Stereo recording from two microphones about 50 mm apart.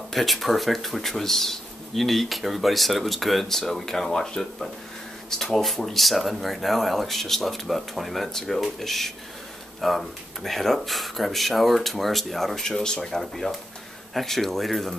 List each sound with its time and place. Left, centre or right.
0.1 s speech: centre